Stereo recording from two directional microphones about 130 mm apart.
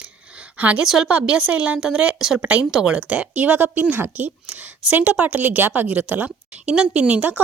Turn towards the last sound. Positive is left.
turn(degrees=-10)  # may be behind; listen again after turning